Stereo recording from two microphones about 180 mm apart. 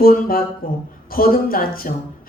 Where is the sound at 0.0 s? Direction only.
55° left (ahead or behind).